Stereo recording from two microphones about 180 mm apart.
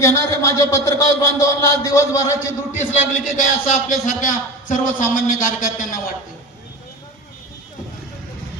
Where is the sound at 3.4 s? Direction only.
45° left (ahead or behind).